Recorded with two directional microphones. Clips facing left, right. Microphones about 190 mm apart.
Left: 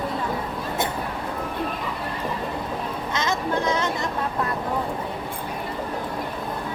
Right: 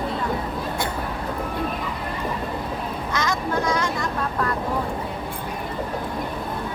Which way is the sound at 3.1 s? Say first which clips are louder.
Even; 25° left (ahead or behind).